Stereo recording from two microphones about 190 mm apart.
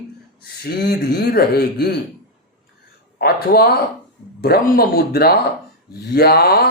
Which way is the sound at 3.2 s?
55° left (ahead or behind).